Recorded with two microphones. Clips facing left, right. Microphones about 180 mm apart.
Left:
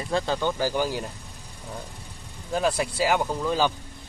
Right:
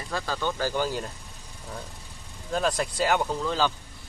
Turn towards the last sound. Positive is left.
turn(degrees=15)  # may be behind; listen again after turning